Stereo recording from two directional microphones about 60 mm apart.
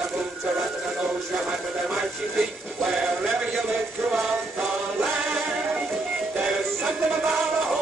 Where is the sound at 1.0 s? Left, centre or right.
Centre.